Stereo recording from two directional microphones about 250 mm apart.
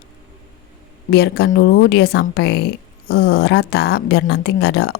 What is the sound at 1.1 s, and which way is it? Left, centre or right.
Speech, left.